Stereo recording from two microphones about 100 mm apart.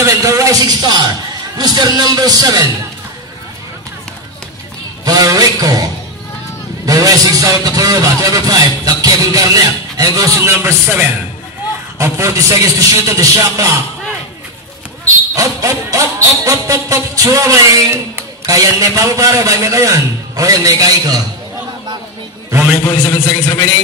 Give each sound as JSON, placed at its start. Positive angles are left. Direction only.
{"t": 0.0, "sound": "speech", "side_deg": -30}
{"t": 5.0, "sound": "a sound", "side_deg": -40}
{"t": 6.9, "sound": "speech", "side_deg": -35}
{"t": 12.0, "sound": "speech", "side_deg": -30}
{"t": 15.3, "sound": "speech", "side_deg": -35}
{"t": 22.8, "sound": "a man's voice", "side_deg": 35}